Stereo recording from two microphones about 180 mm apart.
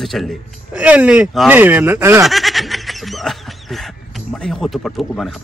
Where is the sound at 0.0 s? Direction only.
Centre (ahead or behind).